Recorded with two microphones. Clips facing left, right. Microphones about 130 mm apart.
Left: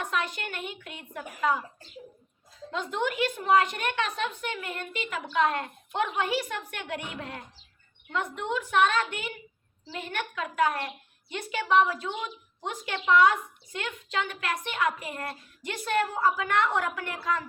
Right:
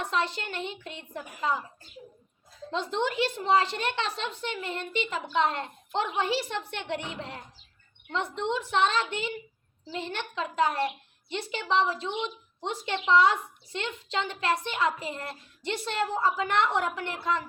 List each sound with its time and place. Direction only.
0.0 s a woman's voice: 30° right (ahead or behind)
2.7 s a woman's voice: 30° right (ahead or behind)